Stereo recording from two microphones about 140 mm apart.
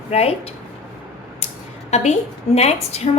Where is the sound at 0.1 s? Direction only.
50° left (ahead or behind).